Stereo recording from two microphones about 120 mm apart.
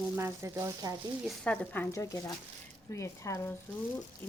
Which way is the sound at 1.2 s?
10° left (ahead or behind).